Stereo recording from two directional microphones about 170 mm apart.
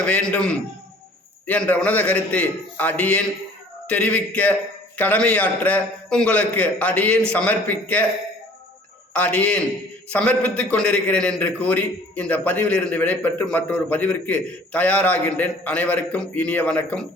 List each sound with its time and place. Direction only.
0.0 s a man's voice: 5° left (ahead or behind)
9.1 s a man's voice: 10° left (ahead or behind)